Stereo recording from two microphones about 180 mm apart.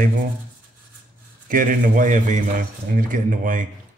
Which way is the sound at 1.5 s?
50° right (ahead or behind).